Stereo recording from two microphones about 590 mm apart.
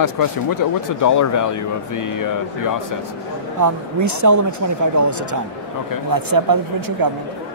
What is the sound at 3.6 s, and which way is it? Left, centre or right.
Speech, right.